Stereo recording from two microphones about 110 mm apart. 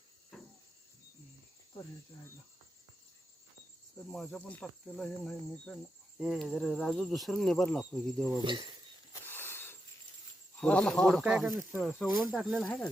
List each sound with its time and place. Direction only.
3.9 s speech: 5° left (ahead or behind)
6.1 s speech: 5° right (ahead or behind)
8.4 s speech: 45° right (ahead or behind)
9.1 s a sound: 20° left (ahead or behind)
10.6 s speech: 10° left (ahead or behind)
11.2 s speech: 5° right (ahead or behind)
11.8 s speech: 5° left (ahead or behind)